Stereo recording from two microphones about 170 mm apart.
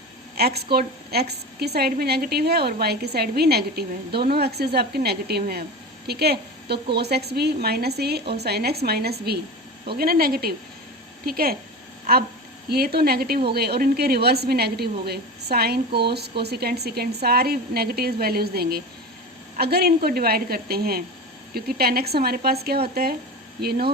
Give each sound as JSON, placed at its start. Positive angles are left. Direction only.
{"t": 0.3, "sound": "a woman's voice", "side_deg": -70}
{"t": 12.6, "sound": "a woman's voice", "side_deg": -65}